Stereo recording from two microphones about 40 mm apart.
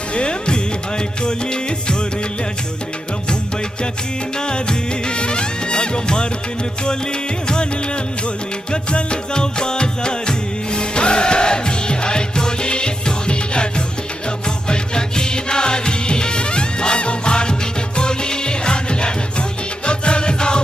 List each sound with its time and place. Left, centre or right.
0.1 s music: left
4.4 s music: left
8.7 s music: left